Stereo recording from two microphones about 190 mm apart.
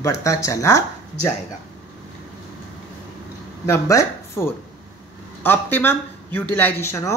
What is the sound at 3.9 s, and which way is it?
A woman's voice, 15° left (ahead or behind).